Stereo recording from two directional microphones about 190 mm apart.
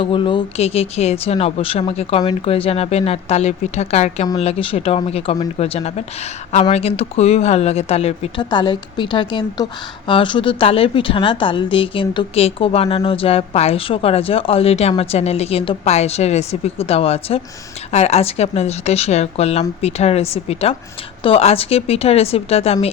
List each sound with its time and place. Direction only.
0.0 s speech: 25° left (ahead or behind)